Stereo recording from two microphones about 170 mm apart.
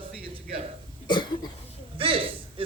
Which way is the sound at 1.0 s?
25° left (ahead or behind).